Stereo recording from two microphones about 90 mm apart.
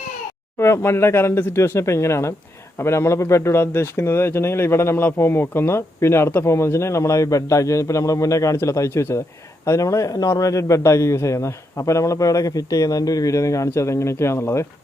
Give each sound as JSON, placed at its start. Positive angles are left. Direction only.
{"t": 0.6, "sound": "a man's voice", "side_deg": 30}